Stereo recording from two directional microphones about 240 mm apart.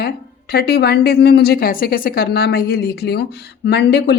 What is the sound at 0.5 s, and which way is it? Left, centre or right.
A woman's voice, left.